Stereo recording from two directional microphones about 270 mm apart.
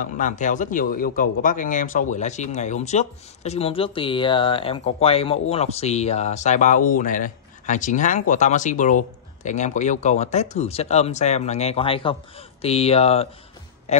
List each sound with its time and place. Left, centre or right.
0.0 s a man's voice: left